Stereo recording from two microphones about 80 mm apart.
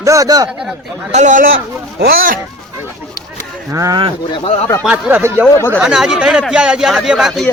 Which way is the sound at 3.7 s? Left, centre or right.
Right.